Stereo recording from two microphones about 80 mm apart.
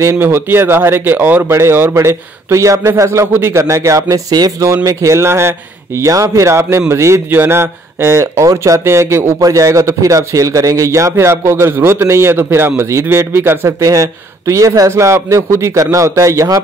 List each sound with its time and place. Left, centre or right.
0.0 s speech: right
4.8 s speech: right